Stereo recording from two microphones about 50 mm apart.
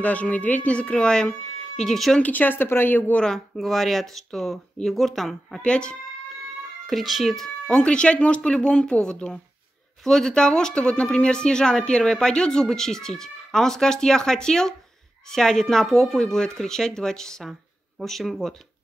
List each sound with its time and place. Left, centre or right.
0.0 s speech: left
1.8 s speech: centre
2.2 s speech: left
3.5 s speech: centre
5.6 s speech: centre
6.9 s speech: centre
7.7 s speech: centre
17.5 s speech: centre